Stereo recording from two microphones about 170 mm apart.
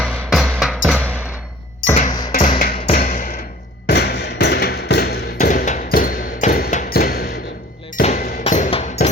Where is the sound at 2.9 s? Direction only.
55° left (ahead or behind).